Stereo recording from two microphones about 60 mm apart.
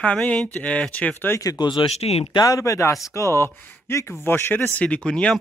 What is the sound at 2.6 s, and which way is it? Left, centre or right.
Speech, left.